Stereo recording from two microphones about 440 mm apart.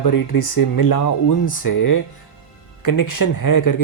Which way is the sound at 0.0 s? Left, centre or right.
Left.